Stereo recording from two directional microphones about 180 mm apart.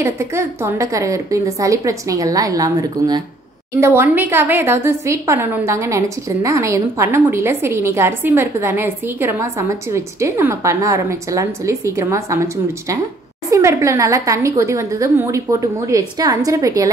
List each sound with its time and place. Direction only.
0.0 s a woman's voice: 15° right (ahead or behind)